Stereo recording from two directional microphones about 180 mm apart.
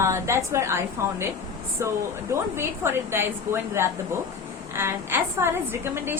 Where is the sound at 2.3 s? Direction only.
15° right (ahead or behind).